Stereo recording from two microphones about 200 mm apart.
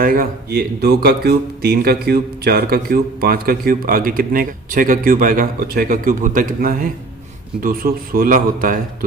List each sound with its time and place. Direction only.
0.0 s speech: 45° right (ahead or behind)